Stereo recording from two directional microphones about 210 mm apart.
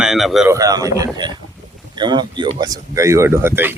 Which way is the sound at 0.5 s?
15° right (ahead or behind).